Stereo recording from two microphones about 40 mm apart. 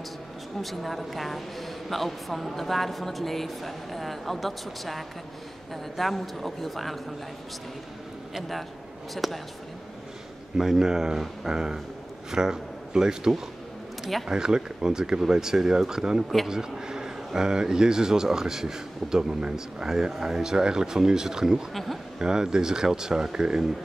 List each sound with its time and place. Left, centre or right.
0.6 s speech: centre
9.1 s speech: centre
10.6 s speech: centre